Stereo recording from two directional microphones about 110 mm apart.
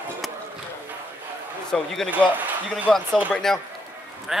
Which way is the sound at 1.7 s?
5° left (ahead or behind).